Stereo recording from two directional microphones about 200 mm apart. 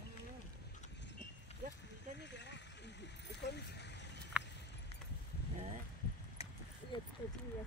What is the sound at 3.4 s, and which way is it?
Vehicle, 55° left (ahead or behind).